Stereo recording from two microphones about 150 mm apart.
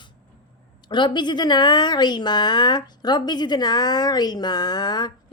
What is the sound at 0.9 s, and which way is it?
A woman's voice, 30° left (ahead or behind).